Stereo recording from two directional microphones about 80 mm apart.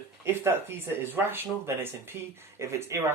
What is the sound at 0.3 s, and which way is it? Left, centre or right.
Speech, right.